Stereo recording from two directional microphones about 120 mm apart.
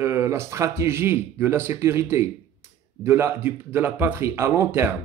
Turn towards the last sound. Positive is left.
turn(degrees=-20)  # may be behind; listen again after turning